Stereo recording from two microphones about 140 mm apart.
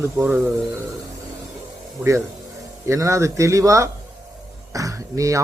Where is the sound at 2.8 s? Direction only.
20° right (ahead or behind).